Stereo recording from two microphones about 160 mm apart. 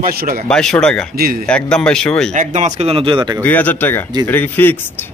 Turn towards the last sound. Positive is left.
turn(degrees=10)  # may be behind; listen again after turning